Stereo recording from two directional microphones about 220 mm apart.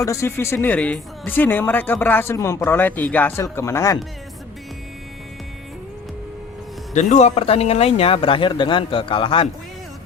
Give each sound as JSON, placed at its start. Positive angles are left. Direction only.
{"t": 0.0, "sound": "speech", "side_deg": 15}
{"t": 6.9, "sound": "speech", "side_deg": 30}